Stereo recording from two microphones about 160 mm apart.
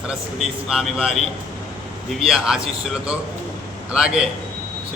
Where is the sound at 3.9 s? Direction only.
5° right (ahead or behind).